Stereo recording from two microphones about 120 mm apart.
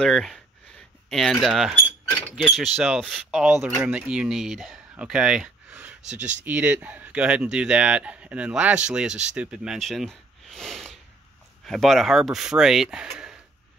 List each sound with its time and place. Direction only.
0.0 s speech: centre (ahead or behind)
3.4 s speech: 15° right (ahead or behind)
6.0 s speech: 90° right
6.4 s speech: 10° right (ahead or behind)